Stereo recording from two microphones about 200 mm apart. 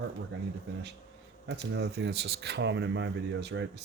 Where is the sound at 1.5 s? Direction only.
60° right (ahead or behind).